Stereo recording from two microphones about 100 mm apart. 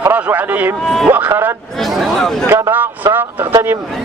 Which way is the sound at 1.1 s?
20° right (ahead or behind).